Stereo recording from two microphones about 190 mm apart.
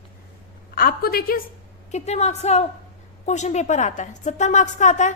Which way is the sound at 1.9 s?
35° left (ahead or behind).